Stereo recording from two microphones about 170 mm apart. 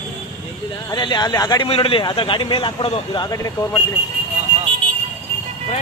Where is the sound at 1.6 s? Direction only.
35° left (ahead or behind).